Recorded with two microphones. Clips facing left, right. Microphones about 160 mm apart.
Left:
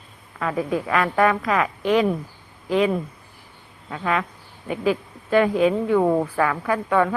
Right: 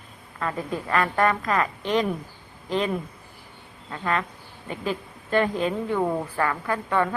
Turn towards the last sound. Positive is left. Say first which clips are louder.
# left 4 dB
turn(degrees=10)  # may be behind; listen again after turning